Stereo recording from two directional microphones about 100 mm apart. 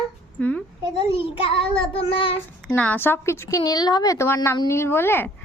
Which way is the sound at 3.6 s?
40° left (ahead or behind).